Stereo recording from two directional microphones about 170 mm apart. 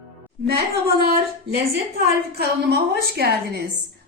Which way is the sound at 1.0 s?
70° right (ahead or behind).